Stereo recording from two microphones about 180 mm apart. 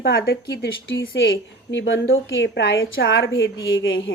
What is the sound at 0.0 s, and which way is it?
Speech, 60° left (ahead or behind).